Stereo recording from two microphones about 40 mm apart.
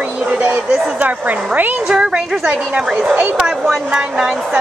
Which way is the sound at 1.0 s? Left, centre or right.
Right.